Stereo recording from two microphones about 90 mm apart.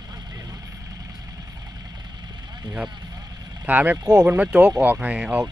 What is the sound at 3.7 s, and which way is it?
Speech, 20° right (ahead or behind).